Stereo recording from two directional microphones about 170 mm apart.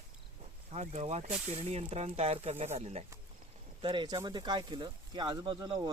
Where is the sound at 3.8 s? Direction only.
30° right (ahead or behind).